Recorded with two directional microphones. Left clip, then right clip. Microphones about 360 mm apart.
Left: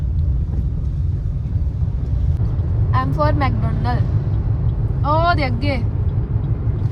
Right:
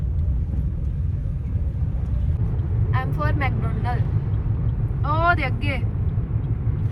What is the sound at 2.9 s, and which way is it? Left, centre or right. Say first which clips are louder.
Vehicle: left 8 dB; left.